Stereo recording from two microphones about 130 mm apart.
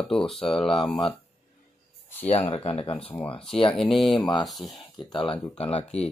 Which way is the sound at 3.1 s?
10° left (ahead or behind).